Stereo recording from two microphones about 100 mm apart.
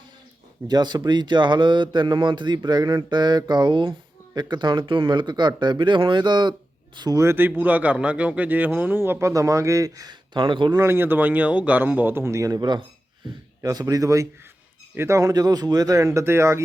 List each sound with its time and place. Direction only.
0.7 s speech: 45° right (ahead or behind)
7.2 s speech: 25° right (ahead or behind); by 10.8 s 55° right (ahead or behind)
10.8 s a man's voice: 25° right (ahead or behind)